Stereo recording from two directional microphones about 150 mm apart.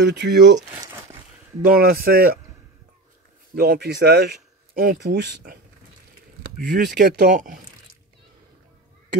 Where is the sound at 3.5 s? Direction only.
90° right.